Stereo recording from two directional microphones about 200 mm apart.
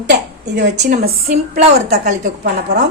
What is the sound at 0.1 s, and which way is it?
Speech, 60° right (ahead or behind).